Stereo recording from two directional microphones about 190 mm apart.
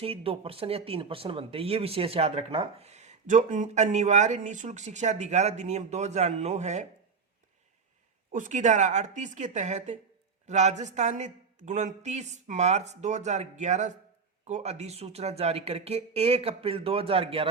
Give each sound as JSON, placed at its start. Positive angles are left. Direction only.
{"t": 0.0, "sound": "speech", "side_deg": -30}
{"t": 8.3, "sound": "speech", "side_deg": -40}